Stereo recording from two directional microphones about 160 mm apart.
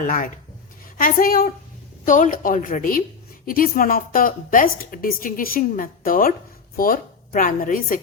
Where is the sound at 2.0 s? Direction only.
55° left (ahead or behind).